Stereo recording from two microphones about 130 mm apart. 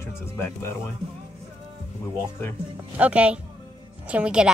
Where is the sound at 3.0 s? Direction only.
10° right (ahead or behind).